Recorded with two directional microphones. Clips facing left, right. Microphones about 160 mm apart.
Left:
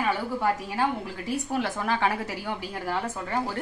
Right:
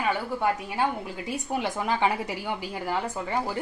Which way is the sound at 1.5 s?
15° right (ahead or behind).